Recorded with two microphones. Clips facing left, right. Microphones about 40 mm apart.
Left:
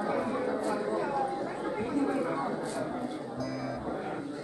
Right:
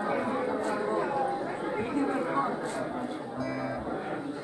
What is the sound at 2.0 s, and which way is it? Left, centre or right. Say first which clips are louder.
Chatter: right 2 dB; right.